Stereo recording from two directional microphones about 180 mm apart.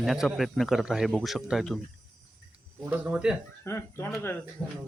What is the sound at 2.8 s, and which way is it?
Speech, 5° right (ahead or behind).